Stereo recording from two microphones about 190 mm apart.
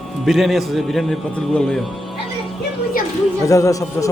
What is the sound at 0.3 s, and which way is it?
Speech, centre (ahead or behind).